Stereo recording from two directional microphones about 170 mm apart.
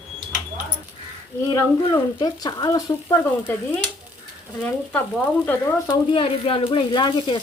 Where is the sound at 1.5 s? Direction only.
25° left (ahead or behind).